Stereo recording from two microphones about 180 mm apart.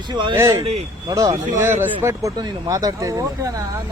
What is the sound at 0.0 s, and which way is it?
Speech, 25° right (ahead or behind).